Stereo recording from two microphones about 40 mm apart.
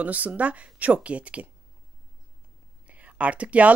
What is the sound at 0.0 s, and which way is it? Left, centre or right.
Speech, right.